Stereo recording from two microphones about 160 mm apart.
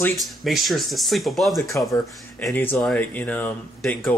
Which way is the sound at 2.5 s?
10° left (ahead or behind).